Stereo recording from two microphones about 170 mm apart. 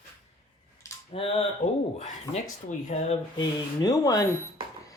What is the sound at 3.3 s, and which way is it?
Speech, 25° left (ahead or behind).